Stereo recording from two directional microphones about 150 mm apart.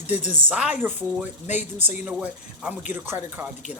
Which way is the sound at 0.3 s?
10° right (ahead or behind).